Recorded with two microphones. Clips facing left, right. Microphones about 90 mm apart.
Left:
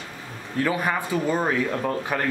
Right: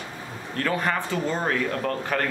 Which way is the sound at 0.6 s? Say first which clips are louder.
Even; 5° left (ahead or behind).